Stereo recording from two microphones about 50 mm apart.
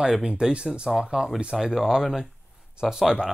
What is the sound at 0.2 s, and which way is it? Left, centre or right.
Speech, centre.